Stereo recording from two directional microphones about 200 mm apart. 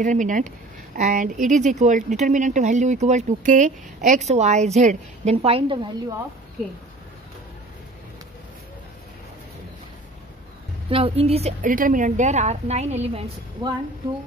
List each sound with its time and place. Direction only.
0.0 s speech: 40° right (ahead or behind); by 6.2 s 20° right (ahead or behind)
10.9 s speech: 30° right (ahead or behind)